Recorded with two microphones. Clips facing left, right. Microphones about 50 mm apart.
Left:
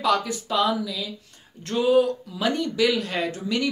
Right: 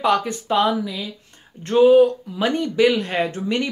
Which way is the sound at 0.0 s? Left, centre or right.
Right.